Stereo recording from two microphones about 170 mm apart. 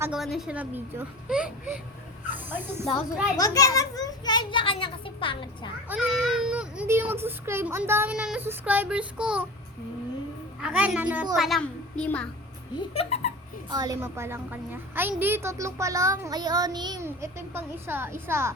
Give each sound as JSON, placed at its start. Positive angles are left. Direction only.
{"t": 0.0, "sound": "speech", "side_deg": -5}
{"t": 3.3, "sound": "a child's voice", "side_deg": 20}
{"t": 5.9, "sound": "a child's voice", "side_deg": -5}
{"t": 10.6, "sound": "a child's voice", "side_deg": -5}
{"t": 12.9, "sound": "speech", "side_deg": 35}
{"t": 13.7, "sound": "a child's voice", "side_deg": -20}
{"t": 15.1, "sound": "child singing", "side_deg": -10}
{"t": 17.1, "sound": "a child's voice", "side_deg": -15}